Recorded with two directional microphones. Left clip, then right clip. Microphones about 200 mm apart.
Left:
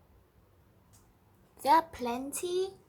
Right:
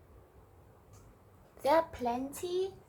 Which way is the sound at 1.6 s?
10° left (ahead or behind).